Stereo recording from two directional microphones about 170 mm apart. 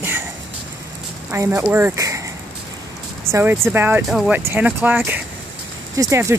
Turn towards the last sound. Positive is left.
turn(degrees=-15)  # may be behind; listen again after turning